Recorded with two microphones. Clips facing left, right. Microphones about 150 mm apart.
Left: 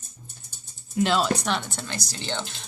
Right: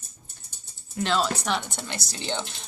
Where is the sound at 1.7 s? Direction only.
20° right (ahead or behind).